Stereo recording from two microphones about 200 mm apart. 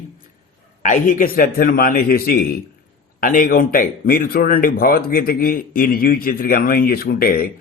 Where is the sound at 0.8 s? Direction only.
40° left (ahead or behind).